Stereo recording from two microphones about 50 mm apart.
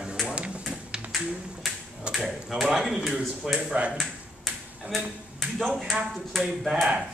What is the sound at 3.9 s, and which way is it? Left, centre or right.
Ping, centre.